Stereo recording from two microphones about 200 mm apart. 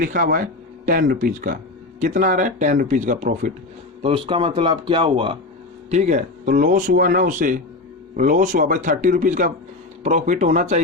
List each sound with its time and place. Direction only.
0.0 s speech: 45° right (ahead or behind)
4.0 s speech: 25° right (ahead or behind)